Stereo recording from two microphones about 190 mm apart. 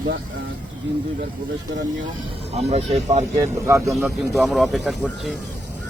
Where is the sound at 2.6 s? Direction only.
35° right (ahead or behind).